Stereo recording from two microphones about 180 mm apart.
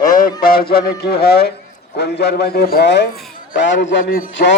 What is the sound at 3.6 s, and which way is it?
Speech, 90° left.